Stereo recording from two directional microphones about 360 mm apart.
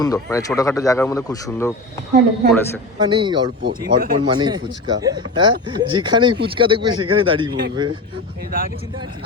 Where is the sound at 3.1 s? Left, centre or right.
Centre.